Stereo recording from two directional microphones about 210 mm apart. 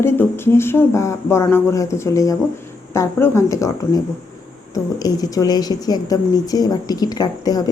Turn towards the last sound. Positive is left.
turn(degrees=20)  # may be behind; listen again after turning